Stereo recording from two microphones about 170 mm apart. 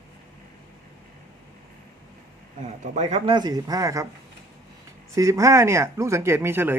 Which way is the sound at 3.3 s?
20° right (ahead or behind).